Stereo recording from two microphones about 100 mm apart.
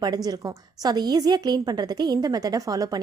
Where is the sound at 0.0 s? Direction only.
40° right (ahead or behind).